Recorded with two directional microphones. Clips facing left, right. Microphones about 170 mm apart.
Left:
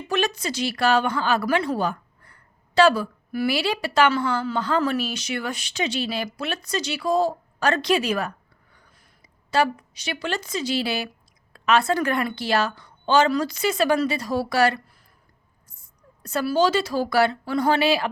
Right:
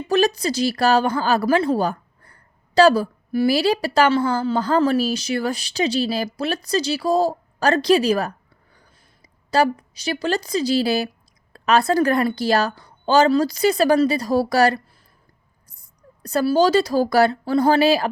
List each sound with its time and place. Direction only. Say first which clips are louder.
0.1 s a woman's voice: right 6 dB; 35° right (ahead or behind)
15.8 s speech: right 5 dB; 35° right (ahead or behind)